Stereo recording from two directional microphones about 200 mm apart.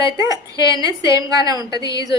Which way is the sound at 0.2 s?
15° right (ahead or behind).